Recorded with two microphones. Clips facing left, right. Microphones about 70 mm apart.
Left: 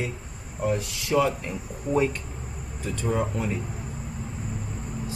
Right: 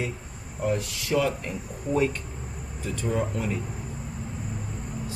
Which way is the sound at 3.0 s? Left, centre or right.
Centre.